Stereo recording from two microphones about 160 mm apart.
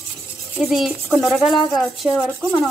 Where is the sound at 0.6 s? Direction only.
5° right (ahead or behind).